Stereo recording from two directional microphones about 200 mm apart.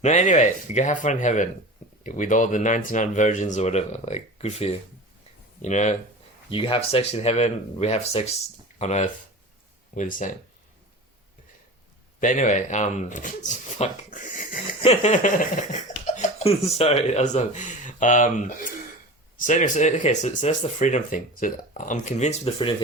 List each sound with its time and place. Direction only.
0.0 s speech: 35° left (ahead or behind)
12.2 s speech: 40° left (ahead or behind)